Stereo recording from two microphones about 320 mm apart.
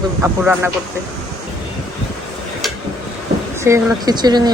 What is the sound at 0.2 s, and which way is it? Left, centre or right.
Speech, centre.